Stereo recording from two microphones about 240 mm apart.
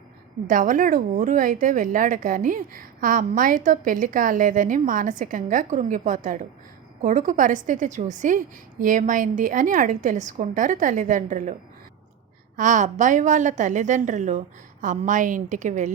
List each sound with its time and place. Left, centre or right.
0.4 s speech: right
12.5 s speech: right